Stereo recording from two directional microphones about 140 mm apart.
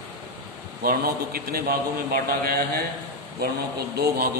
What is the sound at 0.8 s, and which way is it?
A man's voice, 90° right.